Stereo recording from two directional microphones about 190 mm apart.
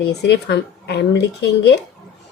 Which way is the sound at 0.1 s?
60° left (ahead or behind).